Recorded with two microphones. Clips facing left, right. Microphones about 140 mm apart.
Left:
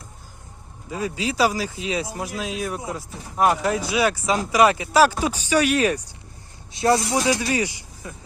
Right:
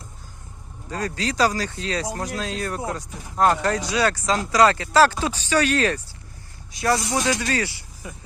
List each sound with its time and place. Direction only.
0.9 s speech: 10° left (ahead or behind)
6.7 s speech: 25° left (ahead or behind)
7.0 s speech: 15° left (ahead or behind)